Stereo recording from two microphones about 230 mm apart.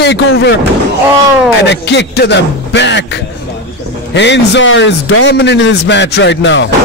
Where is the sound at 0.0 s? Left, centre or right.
Left.